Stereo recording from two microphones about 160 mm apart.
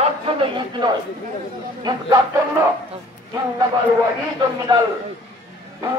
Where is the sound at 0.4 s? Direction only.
30° right (ahead or behind).